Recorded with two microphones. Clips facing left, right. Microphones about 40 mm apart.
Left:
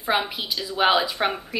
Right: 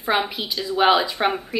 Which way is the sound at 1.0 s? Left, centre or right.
Centre.